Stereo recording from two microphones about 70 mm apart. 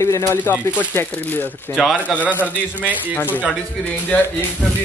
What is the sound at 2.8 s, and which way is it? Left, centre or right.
Speech, left.